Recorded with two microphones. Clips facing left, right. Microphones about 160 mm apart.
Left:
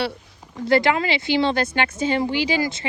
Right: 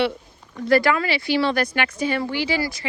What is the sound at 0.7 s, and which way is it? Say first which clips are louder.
Speech: even; 25° left (ahead or behind).